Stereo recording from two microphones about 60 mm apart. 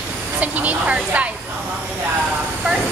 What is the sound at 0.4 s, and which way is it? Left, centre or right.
Speech, right.